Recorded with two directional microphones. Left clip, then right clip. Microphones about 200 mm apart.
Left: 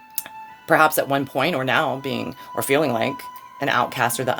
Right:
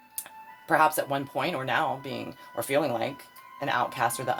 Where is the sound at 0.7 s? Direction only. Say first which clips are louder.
Left 6 dB; 50° left (ahead or behind).